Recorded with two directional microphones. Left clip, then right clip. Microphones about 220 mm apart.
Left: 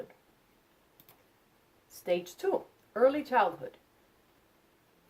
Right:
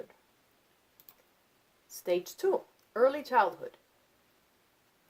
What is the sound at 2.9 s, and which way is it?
Speech, 45° right (ahead or behind).